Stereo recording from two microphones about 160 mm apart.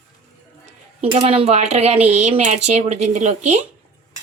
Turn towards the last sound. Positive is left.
turn(degrees=-45)  # may be behind; listen again after turning